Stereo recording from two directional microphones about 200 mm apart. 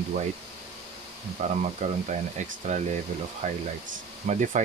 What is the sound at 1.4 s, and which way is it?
Speech, 35° right (ahead or behind).